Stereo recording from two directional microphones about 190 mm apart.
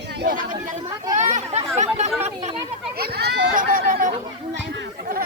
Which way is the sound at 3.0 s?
60° right (ahead or behind).